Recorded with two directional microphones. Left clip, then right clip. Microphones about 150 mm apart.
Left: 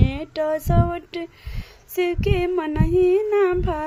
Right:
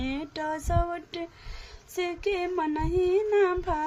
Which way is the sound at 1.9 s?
45° left (ahead or behind).